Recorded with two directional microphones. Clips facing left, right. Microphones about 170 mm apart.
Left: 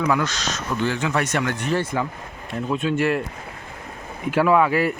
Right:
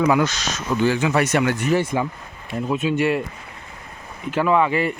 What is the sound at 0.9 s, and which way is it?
Speech, 5° right (ahead or behind).